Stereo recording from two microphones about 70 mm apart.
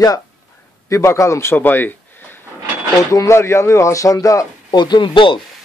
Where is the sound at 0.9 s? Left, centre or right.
Left.